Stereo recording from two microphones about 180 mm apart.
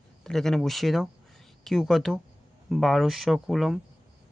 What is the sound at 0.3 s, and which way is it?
Speech, 5° left (ahead or behind).